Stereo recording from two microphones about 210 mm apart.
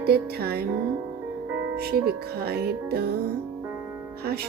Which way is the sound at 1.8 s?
45° right (ahead or behind).